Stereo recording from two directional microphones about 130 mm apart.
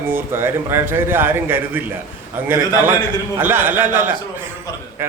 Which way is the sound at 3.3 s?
15° right (ahead or behind).